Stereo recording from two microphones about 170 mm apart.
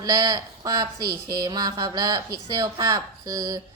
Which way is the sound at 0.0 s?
25° right (ahead or behind).